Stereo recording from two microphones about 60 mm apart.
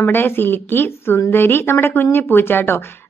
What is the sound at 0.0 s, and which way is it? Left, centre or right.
A woman's voice, left.